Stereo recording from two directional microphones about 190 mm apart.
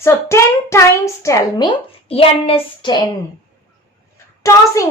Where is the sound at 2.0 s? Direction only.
30° left (ahead or behind).